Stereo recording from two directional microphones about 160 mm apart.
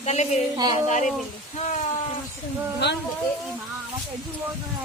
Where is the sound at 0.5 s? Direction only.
25° right (ahead or behind).